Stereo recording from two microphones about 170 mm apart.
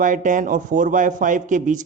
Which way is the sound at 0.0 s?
50° right (ahead or behind).